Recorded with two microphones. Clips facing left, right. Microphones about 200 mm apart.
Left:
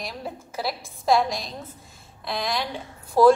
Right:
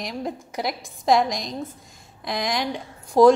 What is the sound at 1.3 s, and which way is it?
A woman's voice, 20° right (ahead or behind).